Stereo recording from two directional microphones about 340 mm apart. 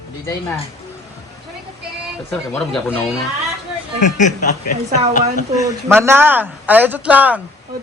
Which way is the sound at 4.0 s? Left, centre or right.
Left.